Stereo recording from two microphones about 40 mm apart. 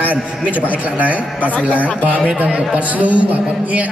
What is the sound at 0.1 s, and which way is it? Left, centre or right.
A man's voice, right.